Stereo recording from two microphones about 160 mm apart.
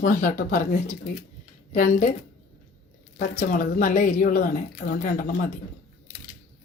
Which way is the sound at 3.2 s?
55° left (ahead or behind).